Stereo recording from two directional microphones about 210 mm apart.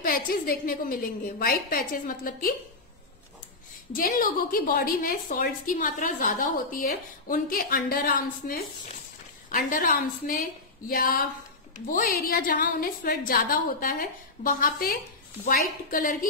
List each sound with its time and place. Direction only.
0.0 s a woman's voice: 45° left (ahead or behind)
3.9 s a woman's voice: 40° left (ahead or behind)